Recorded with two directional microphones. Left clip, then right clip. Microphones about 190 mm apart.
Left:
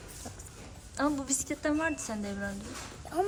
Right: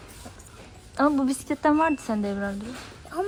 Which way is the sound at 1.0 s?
5° left (ahead or behind).